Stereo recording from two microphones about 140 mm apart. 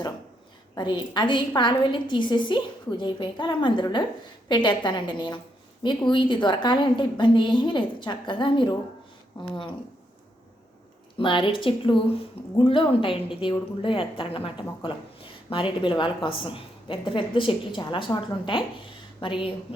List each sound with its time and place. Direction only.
0.8 s a woman's voice: 35° left (ahead or behind)
11.2 s a woman's voice: 35° left (ahead or behind)